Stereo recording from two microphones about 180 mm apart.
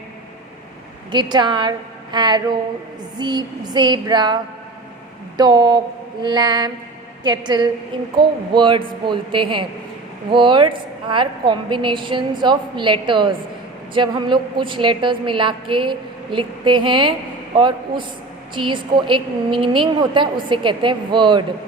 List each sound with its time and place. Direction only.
1.1 s a woman's voice: 25° right (ahead or behind)
5.4 s a woman's voice: 25° right (ahead or behind)